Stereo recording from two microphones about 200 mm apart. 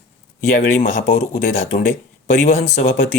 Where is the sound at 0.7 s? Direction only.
35° left (ahead or behind).